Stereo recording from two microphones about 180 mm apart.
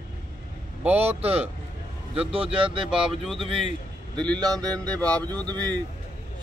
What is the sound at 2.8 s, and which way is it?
Speech, 5° right (ahead or behind).